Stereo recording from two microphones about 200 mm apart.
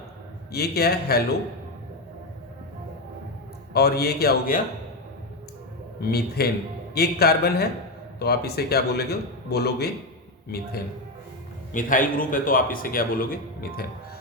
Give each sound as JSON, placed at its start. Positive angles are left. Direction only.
{"t": 0.5, "sound": "a man's voice", "side_deg": 50}
{"t": 3.7, "sound": "a man's voice", "side_deg": 50}
{"t": 6.0, "sound": "a man's voice", "side_deg": 50}
{"t": 11.7, "sound": "a man's voice", "side_deg": 40}